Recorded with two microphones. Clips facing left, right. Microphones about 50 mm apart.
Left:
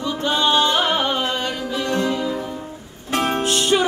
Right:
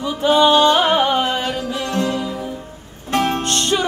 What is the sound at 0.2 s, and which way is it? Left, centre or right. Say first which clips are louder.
Music: right 6 dB; centre.